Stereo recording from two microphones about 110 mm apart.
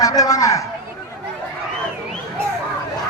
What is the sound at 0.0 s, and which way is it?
Speech, 35° left (ahead or behind).